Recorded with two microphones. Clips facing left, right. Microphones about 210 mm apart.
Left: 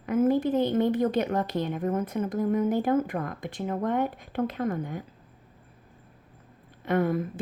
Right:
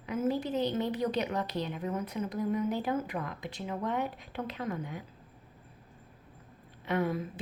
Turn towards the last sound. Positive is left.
turn(degrees=50)  # may be behind; listen again after turning